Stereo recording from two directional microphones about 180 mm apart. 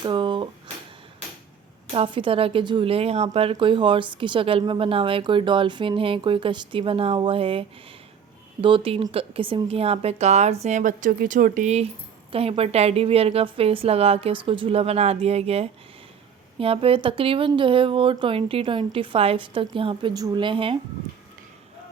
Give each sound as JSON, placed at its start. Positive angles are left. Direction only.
{"t": 0.0, "sound": "a sound", "side_deg": -25}
{"t": 1.9, "sound": "a woman's voice", "side_deg": -30}
{"t": 8.6, "sound": "a woman's voice", "side_deg": -30}